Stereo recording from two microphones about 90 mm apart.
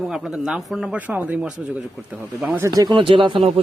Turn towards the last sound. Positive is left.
turn(degrees=-70)  # may be behind; listen again after turning